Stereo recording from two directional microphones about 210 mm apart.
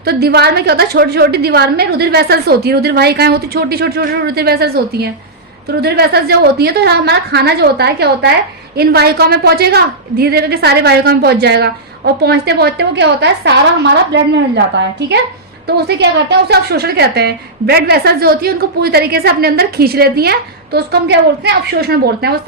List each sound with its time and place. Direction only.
0.0 s a woman's voice: 50° right (ahead or behind)
15.6 s a woman's voice: 55° right (ahead or behind)